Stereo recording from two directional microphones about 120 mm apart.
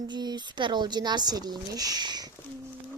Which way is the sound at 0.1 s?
35° right (ahead or behind).